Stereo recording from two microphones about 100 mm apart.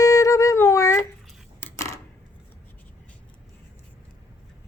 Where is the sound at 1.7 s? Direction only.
30° left (ahead or behind).